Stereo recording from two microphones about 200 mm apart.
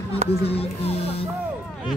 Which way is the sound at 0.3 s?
30° left (ahead or behind).